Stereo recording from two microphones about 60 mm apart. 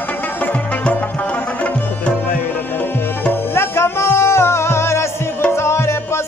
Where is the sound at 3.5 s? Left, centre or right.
Left.